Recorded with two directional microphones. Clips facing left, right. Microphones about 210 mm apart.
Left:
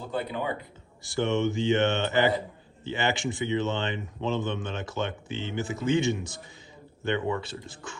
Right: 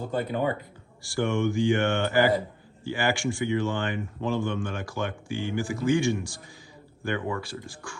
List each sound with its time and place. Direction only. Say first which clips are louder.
0.1 s speech: right 3 dB; 45° right (ahead or behind)
1.0 s speech: even; 20° left (ahead or behind)